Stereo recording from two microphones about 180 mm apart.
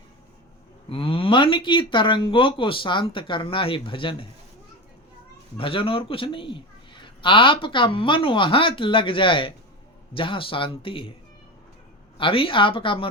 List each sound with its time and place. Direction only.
0.9 s speech: 30° left (ahead or behind)
5.5 s a man's voice: 30° left (ahead or behind)
12.1 s speech: 30° left (ahead or behind)